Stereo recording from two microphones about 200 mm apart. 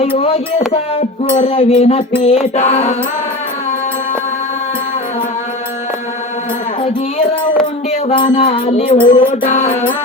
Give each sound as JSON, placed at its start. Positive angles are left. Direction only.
{"t": 0.2, "sound": "music", "side_deg": 30}
{"t": 8.0, "sound": "music", "side_deg": 25}
{"t": 9.0, "sound": "music", "side_deg": 40}